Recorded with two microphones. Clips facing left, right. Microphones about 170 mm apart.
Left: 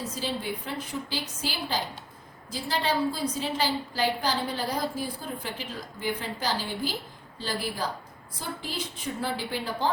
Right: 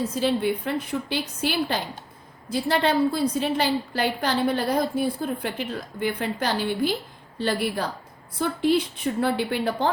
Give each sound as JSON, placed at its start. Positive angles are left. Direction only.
{"t": 0.2, "sound": "a woman's voice", "side_deg": -60}